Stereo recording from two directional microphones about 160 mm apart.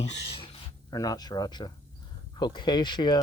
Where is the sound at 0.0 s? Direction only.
40° left (ahead or behind).